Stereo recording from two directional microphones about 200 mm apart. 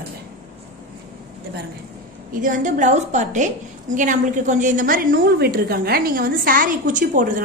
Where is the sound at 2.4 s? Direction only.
40° right (ahead or behind).